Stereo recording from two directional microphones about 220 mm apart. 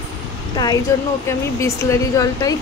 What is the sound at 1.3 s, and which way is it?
Speech, 15° left (ahead or behind).